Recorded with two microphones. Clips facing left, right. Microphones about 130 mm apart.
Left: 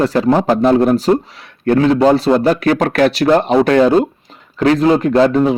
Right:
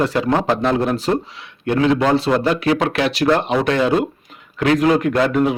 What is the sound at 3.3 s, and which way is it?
Speech, 35° left (ahead or behind).